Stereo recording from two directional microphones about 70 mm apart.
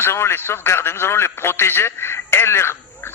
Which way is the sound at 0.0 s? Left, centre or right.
Left.